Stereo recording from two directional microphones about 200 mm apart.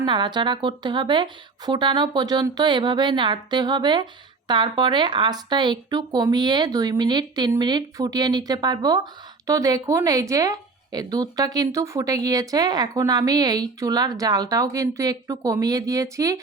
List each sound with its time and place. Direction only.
0.0 s a woman's voice: 25° right (ahead or behind)